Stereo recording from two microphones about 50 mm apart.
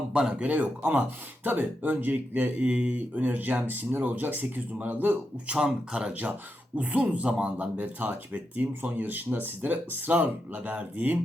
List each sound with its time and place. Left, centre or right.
0.1 s speech: centre
0.4 s speech: right
5.5 s a man's voice: centre
6.7 s a man's voice: right